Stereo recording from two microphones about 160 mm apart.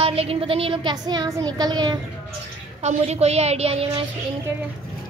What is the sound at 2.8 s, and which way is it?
A woman's voice, 40° right (ahead or behind).